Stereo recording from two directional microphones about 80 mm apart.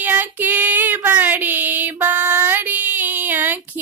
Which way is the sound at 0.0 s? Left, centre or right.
Right.